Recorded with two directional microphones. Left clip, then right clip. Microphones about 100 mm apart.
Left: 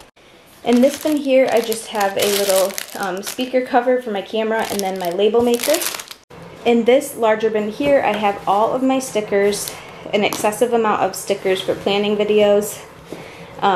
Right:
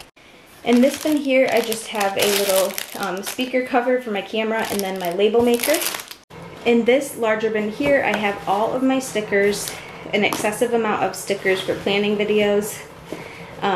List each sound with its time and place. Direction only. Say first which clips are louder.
0.7 s a woman's voice: left 2 dB; 10° left (ahead or behind); by 12.5 s 25° left (ahead or behind)
13.6 s a woman's voice: left 5 dB; 20° left (ahead or behind)